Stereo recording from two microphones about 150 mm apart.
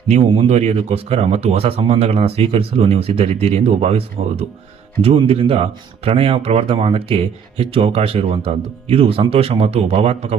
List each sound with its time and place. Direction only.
0.1 s speech: 50° right (ahead or behind)